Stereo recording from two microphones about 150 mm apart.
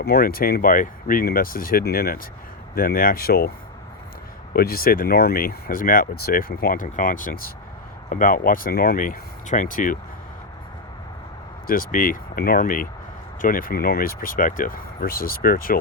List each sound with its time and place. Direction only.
0.0 s speech: 85° left
2.7 s speech: 75° left (ahead or behind)
4.5 s speech: 85° left; by 10.0 s 65° left (ahead or behind)
11.6 s speech: 70° left (ahead or behind)